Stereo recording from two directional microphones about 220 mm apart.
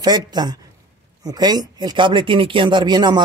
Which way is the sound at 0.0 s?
20° right (ahead or behind).